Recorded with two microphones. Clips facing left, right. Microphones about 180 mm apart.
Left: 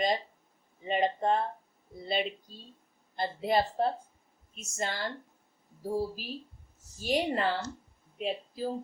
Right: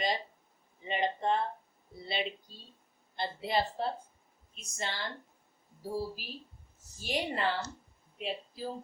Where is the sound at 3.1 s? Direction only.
45° left (ahead or behind).